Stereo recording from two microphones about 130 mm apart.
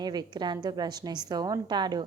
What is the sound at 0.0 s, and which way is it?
A woman's voice, 30° right (ahead or behind).